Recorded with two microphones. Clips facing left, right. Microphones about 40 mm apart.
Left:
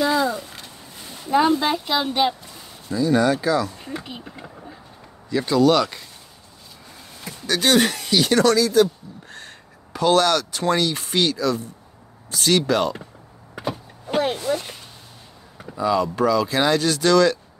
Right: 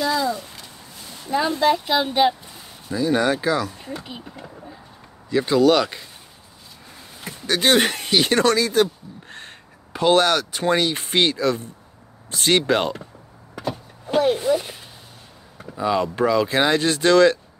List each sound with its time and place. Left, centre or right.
0.0 s a sound: left
1.5 s speech: centre
1.9 s speech: centre
2.9 s speech: right
3.6 s speech: centre
3.9 s speech: centre
5.3 s speech: right
7.2 s speech: right
9.9 s speech: right
14.3 s speech: centre
15.8 s speech: right